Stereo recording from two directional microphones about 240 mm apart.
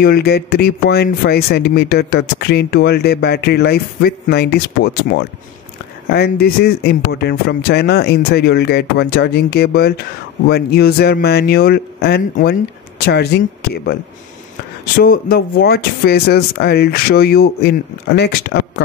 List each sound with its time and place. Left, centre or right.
0.0 s speech: left
15.0 s speech: left